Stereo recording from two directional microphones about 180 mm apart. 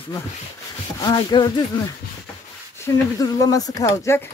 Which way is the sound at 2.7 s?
20° left (ahead or behind).